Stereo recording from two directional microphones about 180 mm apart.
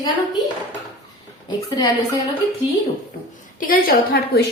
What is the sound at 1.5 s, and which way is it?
Speech, 25° left (ahead or behind).